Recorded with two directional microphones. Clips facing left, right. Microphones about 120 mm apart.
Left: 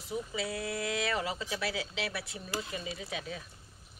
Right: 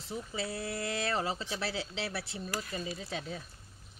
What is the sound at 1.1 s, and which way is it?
Speech, 30° right (ahead or behind).